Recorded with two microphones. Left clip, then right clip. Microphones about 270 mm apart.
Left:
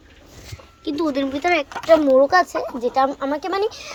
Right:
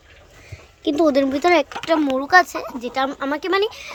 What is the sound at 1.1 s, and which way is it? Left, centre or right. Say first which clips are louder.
Speech: right 2 dB; centre.